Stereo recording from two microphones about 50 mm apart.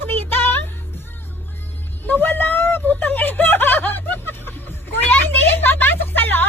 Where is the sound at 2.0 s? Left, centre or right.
Left.